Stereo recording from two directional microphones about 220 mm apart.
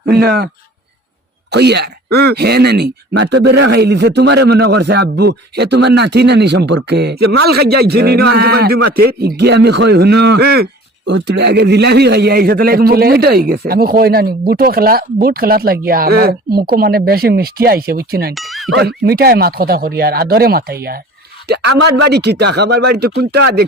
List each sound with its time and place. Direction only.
0.0 s speech: 45° right (ahead or behind)
18.3 s speech: centre (ahead or behind)
18.7 s speech: 45° right (ahead or behind)